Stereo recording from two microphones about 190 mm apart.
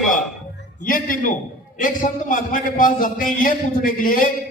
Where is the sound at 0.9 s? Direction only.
45° left (ahead or behind).